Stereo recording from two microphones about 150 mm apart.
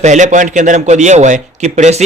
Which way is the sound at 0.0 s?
55° right (ahead or behind).